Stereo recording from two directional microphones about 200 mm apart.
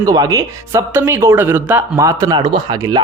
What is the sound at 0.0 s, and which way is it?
Speech, 20° right (ahead or behind).